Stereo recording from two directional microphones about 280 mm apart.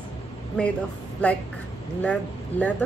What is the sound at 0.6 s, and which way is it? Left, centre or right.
Speech, centre.